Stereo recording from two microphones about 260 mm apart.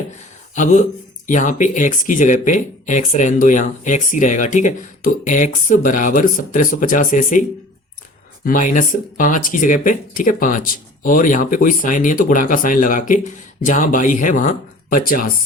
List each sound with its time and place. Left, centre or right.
0.5 s speech: left
8.4 s speech: left